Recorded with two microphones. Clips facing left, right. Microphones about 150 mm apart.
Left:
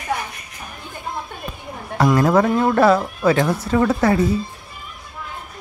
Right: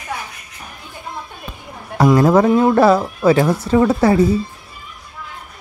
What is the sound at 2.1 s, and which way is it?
Speech, 25° right (ahead or behind).